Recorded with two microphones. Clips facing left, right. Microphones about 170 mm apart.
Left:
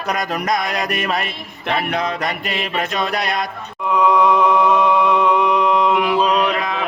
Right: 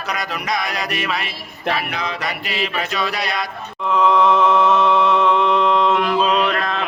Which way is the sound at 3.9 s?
15° left (ahead or behind).